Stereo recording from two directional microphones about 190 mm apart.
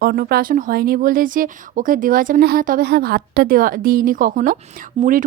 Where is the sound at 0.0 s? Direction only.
55° right (ahead or behind).